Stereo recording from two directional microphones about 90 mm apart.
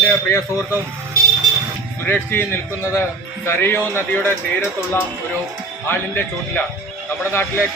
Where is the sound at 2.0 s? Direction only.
25° left (ahead or behind).